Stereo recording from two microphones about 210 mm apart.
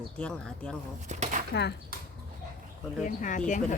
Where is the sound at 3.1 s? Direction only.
35° left (ahead or behind).